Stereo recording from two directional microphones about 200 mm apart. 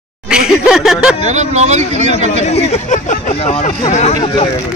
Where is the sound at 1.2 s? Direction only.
35° right (ahead or behind).